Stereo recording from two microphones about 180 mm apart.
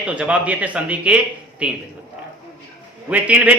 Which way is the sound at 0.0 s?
5° right (ahead or behind).